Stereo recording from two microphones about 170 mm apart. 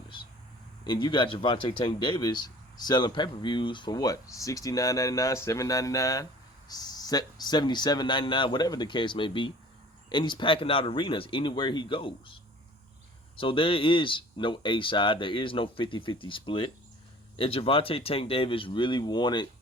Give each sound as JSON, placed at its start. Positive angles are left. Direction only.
{"t": 0.9, "sound": "speech", "side_deg": 30}
{"t": 13.4, "sound": "speech", "side_deg": 30}